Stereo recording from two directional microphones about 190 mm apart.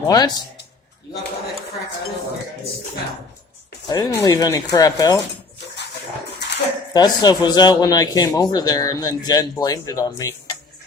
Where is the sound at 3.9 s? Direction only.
20° left (ahead or behind).